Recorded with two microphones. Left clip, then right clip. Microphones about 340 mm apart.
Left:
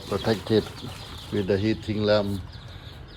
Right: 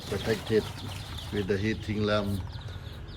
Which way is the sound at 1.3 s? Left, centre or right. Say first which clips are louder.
Left 5 dB; centre.